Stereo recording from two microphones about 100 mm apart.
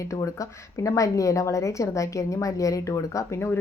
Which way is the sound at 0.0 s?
30° left (ahead or behind).